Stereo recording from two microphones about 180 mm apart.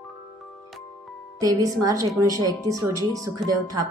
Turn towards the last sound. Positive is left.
turn(degrees=-20)  # may be behind; listen again after turning